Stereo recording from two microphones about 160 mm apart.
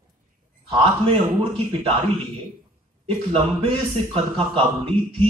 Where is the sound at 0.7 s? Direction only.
35° right (ahead or behind).